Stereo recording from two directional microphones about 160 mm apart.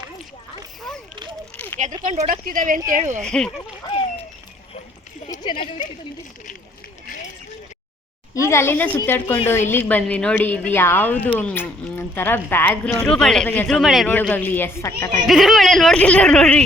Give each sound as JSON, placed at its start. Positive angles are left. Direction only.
{"t": 0.9, "sound": "a sound", "side_deg": 0}
{"t": 1.8, "sound": "speech", "side_deg": -50}
{"t": 2.9, "sound": "speech", "side_deg": -50}
{"t": 3.2, "sound": "speech", "side_deg": 5}
{"t": 5.4, "sound": "speech", "side_deg": 30}
{"t": 8.4, "sound": "a woman's voice", "side_deg": 15}
{"t": 14.1, "sound": "a woman's voice", "side_deg": 10}
{"t": 15.3, "sound": "speech", "side_deg": 0}